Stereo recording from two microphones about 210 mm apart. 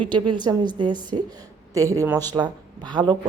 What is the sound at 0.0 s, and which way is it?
A woman's voice, 20° right (ahead or behind).